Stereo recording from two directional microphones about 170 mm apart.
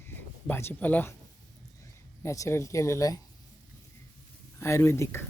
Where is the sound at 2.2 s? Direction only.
15° left (ahead or behind).